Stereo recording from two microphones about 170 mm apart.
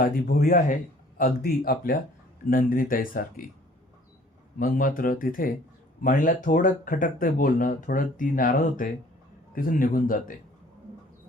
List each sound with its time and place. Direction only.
0.0 s speech: 55° left (ahead or behind)
4.6 s speech: 50° left (ahead or behind)